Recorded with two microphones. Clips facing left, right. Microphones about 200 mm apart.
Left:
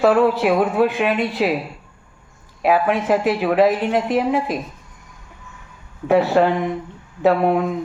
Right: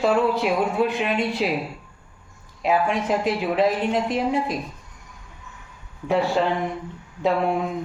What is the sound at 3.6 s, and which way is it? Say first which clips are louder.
Speech: left 4 dB; 5° left (ahead or behind).